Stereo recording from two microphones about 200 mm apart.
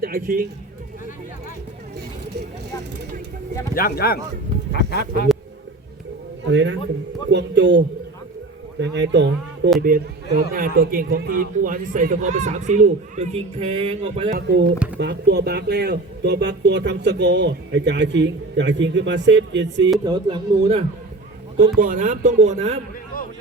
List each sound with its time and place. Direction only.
0.0 s a man's voice: 45° right (ahead or behind)
3.8 s speech: 50° left (ahead or behind)
6.4 s a man's voice: 65° right (ahead or behind)
9.8 s speech: 45° right (ahead or behind)
14.3 s speech: 55° right (ahead or behind)
20.1 s speech: 20° right (ahead or behind)
21.8 s speech: 40° right (ahead or behind)